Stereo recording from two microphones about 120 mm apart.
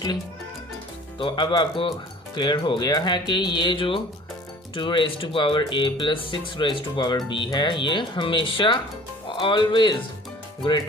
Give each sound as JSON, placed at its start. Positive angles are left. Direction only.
{"t": 1.2, "sound": "speech", "side_deg": 45}